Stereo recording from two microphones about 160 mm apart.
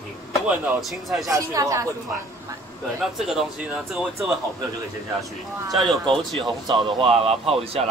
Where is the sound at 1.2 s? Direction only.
20° right (ahead or behind).